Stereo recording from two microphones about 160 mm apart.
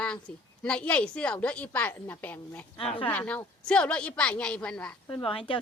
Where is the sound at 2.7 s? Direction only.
35° left (ahead or behind).